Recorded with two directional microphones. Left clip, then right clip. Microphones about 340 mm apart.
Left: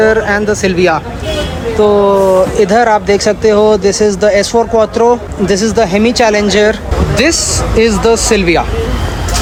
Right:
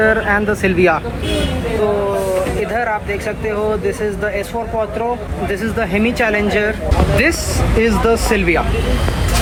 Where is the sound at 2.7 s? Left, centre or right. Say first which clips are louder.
Left 10 dB; left.